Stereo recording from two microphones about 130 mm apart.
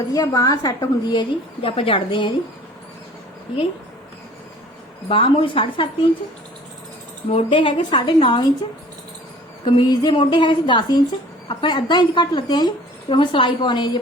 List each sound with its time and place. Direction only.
0.1 s a woman's voice: 30° left (ahead or behind)
1.7 s a woman's voice: 45° left (ahead or behind)
5.0 s a woman's voice: 45° left (ahead or behind)
7.3 s a woman's voice: 45° left (ahead or behind)
9.6 s a woman's voice: 35° left (ahead or behind)